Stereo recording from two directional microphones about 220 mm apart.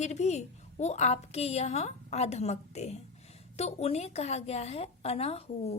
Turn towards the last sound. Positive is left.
turn(degrees=25)  # may be behind; listen again after turning